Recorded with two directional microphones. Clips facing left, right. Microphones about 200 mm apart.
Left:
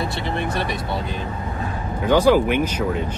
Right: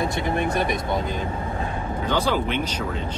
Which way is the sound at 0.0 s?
15° right (ahead or behind).